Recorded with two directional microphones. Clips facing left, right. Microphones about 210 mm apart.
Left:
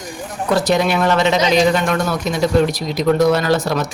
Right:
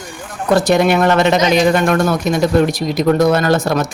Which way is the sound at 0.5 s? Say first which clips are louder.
Right 4 dB; 55° right (ahead or behind).